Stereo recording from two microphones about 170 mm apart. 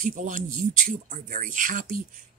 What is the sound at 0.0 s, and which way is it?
Speech, 50° right (ahead or behind).